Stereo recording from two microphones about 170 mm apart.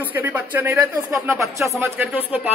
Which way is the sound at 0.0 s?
10° right (ahead or behind).